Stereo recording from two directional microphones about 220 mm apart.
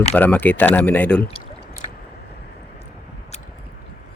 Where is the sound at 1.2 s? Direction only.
25° left (ahead or behind).